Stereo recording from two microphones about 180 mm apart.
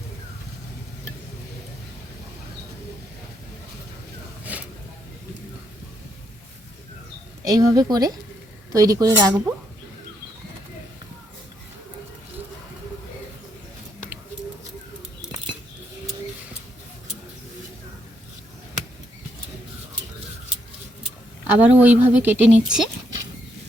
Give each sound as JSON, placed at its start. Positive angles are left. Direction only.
{"t": 4.5, "sound": "vehicle", "side_deg": -10}
{"t": 7.4, "sound": "speech", "side_deg": -20}
{"t": 21.4, "sound": "speech", "side_deg": -10}